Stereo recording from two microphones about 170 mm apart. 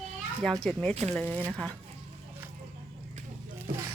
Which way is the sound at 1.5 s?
5° left (ahead or behind).